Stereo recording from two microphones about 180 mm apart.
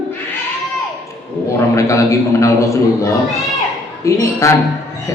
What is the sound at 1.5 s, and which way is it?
A man's voice, 15° left (ahead or behind).